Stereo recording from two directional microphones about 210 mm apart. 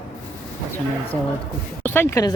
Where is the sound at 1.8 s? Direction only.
10° left (ahead or behind).